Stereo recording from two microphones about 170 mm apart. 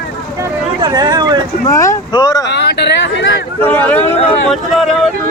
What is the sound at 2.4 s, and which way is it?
Speech, 90° left.